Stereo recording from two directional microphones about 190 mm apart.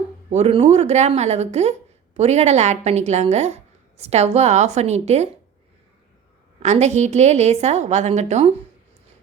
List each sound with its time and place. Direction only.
0.3 s a woman's voice: 35° right (ahead or behind)
6.6 s a woman's voice: 35° right (ahead or behind)